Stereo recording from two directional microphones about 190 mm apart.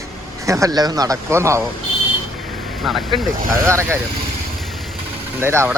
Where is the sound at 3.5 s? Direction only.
15° right (ahead or behind).